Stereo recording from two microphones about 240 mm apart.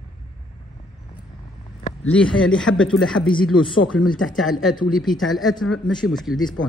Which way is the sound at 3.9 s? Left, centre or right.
Left.